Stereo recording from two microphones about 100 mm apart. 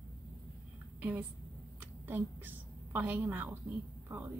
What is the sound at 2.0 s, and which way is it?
A woman's voice, 20° right (ahead or behind).